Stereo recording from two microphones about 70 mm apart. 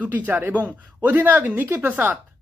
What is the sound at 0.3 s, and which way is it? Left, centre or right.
Speech, right.